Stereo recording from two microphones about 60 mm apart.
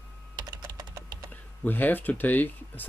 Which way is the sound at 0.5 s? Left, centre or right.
Right.